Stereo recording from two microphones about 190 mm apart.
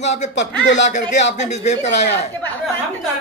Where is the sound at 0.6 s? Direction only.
75° left (ahead or behind).